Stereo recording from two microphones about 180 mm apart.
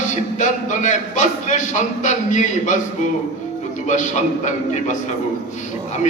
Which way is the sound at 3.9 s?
45° left (ahead or behind).